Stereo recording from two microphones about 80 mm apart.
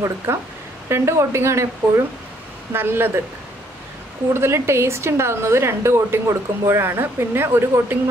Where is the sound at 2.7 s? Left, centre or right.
Right.